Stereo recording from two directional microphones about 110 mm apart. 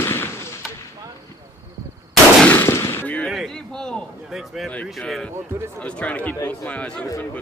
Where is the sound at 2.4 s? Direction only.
20° left (ahead or behind).